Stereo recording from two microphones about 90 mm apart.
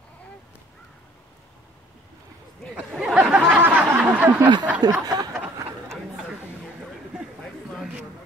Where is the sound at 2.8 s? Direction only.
10° right (ahead or behind).